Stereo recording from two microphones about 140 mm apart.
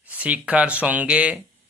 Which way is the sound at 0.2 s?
10° right (ahead or behind).